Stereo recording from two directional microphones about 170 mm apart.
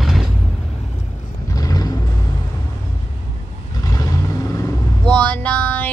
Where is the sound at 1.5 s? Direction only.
20° left (ahead or behind).